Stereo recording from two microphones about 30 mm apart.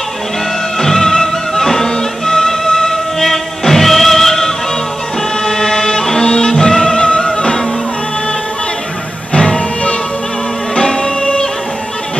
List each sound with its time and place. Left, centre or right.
0.7 s music: centre
5.6 s music: centre
9.3 s music: left
10.8 s music: left